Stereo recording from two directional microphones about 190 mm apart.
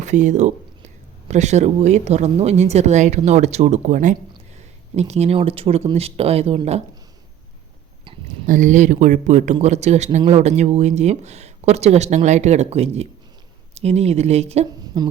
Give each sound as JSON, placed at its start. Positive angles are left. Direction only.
{"t": 0.0, "sound": "speech", "side_deg": -40}
{"t": 8.4, "sound": "speech", "side_deg": -45}